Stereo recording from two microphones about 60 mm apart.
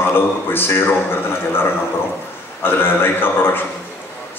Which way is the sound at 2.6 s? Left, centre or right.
Left.